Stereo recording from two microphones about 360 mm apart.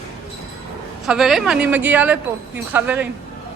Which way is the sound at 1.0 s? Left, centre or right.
Centre.